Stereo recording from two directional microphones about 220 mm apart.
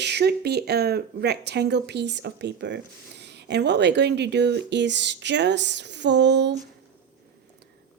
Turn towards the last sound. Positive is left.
turn(degrees=-50)  # may be behind; listen again after turning